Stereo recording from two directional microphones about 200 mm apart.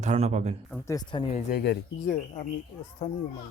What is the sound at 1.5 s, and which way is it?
Speech, 50° left (ahead or behind).